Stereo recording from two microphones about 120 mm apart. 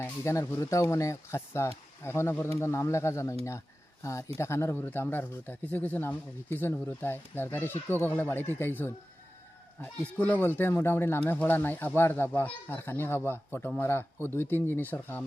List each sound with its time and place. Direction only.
0.0 s speech: 25° left (ahead or behind)